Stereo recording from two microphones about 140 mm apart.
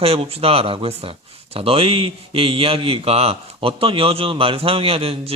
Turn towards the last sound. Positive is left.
turn(degrees=-45)  # may be behind; listen again after turning